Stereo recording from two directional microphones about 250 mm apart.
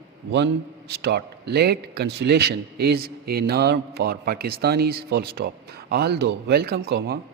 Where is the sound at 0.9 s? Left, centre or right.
Right.